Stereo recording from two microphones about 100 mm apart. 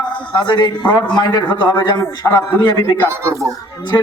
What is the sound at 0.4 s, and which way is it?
Speech, 50° left (ahead or behind).